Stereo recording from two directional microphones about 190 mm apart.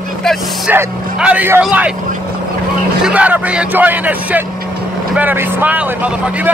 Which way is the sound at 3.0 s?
5° right (ahead or behind).